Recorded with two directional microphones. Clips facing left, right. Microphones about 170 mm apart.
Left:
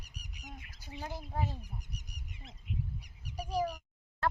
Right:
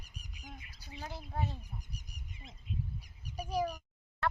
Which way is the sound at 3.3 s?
85° left.